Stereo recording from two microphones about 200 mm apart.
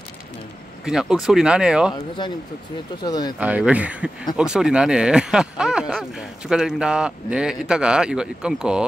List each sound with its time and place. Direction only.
0.8 s speech: 5° right (ahead or behind)
3.0 s speech: 20° left (ahead or behind)
3.3 s speech: 5° right (ahead or behind)